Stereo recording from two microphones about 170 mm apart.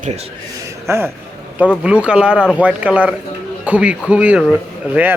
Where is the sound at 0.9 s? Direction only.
15° right (ahead or behind).